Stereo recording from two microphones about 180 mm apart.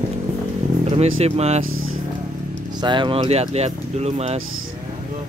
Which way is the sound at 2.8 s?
25° right (ahead or behind).